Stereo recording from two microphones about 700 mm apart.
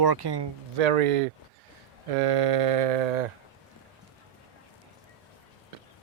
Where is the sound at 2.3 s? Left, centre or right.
Right.